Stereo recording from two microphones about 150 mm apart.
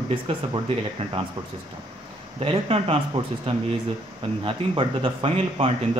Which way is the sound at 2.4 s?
40° right (ahead or behind).